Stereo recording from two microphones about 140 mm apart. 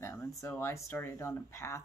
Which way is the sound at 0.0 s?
20° left (ahead or behind).